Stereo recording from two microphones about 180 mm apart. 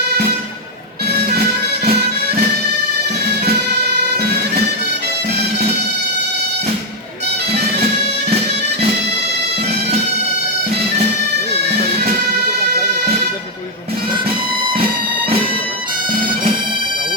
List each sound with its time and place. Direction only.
1.0 s music: 60° right (ahead or behind)